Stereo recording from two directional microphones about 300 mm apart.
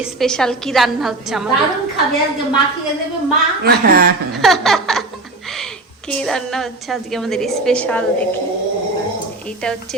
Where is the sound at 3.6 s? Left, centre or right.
Right.